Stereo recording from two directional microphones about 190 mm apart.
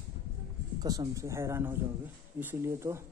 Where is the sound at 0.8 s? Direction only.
20° right (ahead or behind).